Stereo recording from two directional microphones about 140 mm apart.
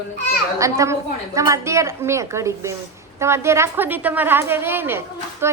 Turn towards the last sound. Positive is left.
turn(degrees=-15)  # may be behind; listen again after turning